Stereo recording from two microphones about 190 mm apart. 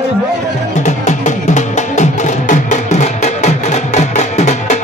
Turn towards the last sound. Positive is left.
turn(degrees=40)  # may be behind; listen again after turning